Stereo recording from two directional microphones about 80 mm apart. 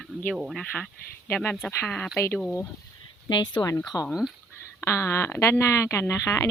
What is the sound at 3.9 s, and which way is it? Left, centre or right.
Speech, left.